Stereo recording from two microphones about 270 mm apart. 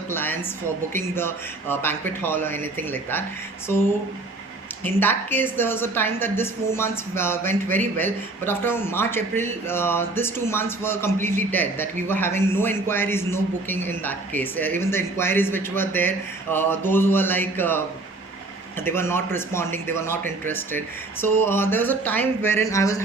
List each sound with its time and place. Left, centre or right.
0.1 s a sound: centre
0.9 s speech: centre
4.8 s speech: centre
18.9 s speech: centre